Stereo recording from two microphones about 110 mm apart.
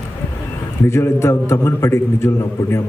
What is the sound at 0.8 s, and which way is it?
A man's voice, 25° left (ahead or behind).